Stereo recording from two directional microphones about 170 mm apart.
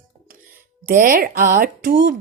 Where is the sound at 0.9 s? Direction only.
55° right (ahead or behind).